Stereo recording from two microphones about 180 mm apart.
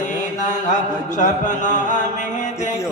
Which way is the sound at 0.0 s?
45° left (ahead or behind).